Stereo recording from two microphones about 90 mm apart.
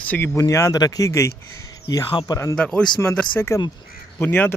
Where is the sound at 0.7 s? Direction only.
45° left (ahead or behind).